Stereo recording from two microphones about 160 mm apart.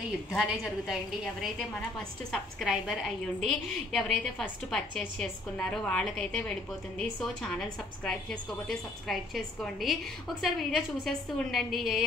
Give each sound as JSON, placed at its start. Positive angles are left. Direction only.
{"t": 0.4, "sound": "a woman's voice", "side_deg": 0}